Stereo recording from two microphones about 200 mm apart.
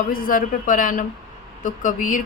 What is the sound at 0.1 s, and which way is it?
A woman's voice, 45° left (ahead or behind).